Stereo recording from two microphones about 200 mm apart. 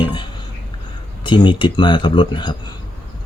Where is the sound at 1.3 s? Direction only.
25° left (ahead or behind).